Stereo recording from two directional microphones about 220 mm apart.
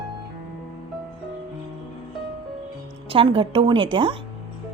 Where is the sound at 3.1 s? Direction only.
25° right (ahead or behind).